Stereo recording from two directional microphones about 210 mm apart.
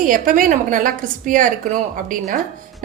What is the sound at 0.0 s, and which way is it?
A woman's voice, 40° right (ahead or behind).